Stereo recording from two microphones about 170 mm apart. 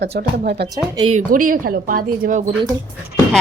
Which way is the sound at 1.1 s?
55° right (ahead or behind).